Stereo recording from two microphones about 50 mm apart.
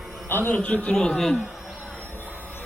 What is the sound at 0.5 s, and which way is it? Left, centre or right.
Speech, left.